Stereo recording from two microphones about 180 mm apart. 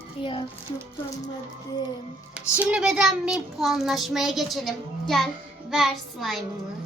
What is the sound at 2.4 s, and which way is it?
Child singing, 5° right (ahead or behind).